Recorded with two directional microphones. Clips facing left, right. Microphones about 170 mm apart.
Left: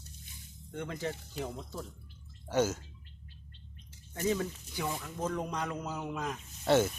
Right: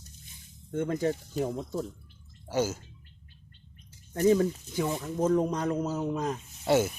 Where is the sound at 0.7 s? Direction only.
45° right (ahead or behind).